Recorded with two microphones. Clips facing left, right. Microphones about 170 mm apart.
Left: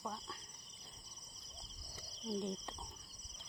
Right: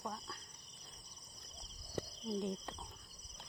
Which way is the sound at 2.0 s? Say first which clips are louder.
Right 17 dB; 65° right (ahead or behind).